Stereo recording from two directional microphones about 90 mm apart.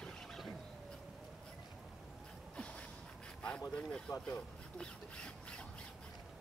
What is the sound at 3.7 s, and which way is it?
Speech, 10° left (ahead or behind).